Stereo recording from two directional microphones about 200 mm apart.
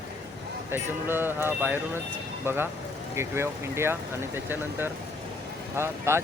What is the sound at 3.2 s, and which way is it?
Speech, 15° right (ahead or behind).